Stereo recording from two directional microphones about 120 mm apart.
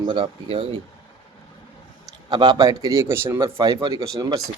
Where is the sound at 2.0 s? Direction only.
35° right (ahead or behind).